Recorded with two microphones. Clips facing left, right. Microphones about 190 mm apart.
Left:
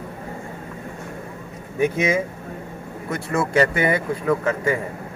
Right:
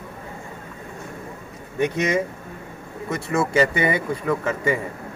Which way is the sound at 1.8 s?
5° left (ahead or behind).